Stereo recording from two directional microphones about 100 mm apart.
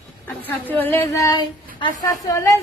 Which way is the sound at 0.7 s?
20° left (ahead or behind).